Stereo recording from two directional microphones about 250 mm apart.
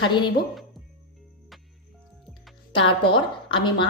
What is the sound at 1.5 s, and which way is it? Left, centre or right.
Music, centre.